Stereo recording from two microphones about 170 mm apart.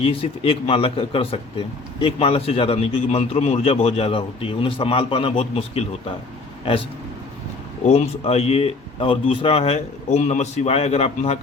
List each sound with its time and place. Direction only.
0.0 s a man's voice: 35° left (ahead or behind)
7.9 s a man's voice: 35° left (ahead or behind)